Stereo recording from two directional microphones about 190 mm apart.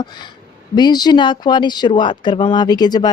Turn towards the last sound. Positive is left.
turn(degrees=20)  # may be behind; listen again after turning